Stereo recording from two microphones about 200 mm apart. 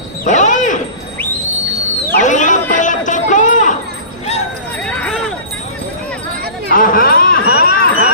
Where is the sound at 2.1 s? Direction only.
40° left (ahead or behind).